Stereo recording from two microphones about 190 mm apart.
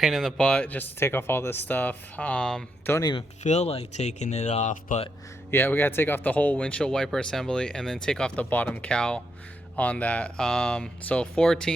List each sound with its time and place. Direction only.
0.0 s speech: centre (ahead or behind); by 3.2 s 20° left (ahead or behind)
3.4 s speech: 35° left (ahead or behind)
5.5 s speech: 10° left (ahead or behind)